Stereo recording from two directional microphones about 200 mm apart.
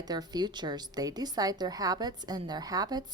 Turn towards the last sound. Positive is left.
turn(degrees=-20)  # may be behind; listen again after turning